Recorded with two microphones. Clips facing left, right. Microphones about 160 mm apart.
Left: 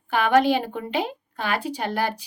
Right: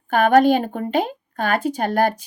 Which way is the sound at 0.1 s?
45° right (ahead or behind).